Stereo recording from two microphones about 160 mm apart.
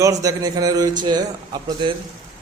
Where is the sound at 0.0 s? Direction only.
20° right (ahead or behind).